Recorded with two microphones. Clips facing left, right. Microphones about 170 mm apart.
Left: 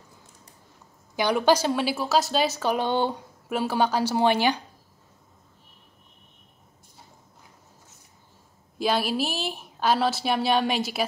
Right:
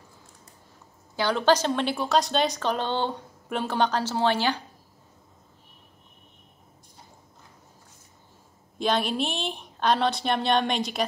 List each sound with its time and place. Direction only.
1.1 s a woman's voice: 15° left (ahead or behind)
8.7 s a woman's voice: 5° left (ahead or behind)